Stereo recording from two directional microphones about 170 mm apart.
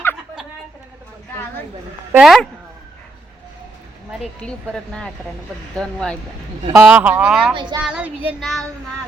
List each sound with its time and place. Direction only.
2.1 s speech: centre (ahead or behind)
4.4 s speech: 5° left (ahead or behind)
6.7 s speech: 10° right (ahead or behind)
7.5 s speech: 30° right (ahead or behind)
7.9 s speech: 10° right (ahead or behind)